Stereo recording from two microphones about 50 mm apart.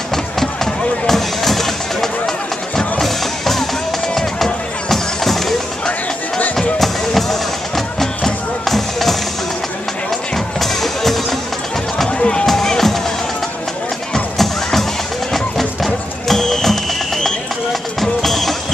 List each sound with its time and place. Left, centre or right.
0.1 s music: centre
6.5 s music: centre
10.3 s music: centre
12.1 s music: centre
14.1 s music: centre